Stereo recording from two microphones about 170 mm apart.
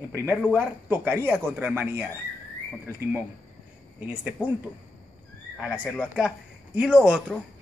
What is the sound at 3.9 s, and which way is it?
Speech, 10° right (ahead or behind).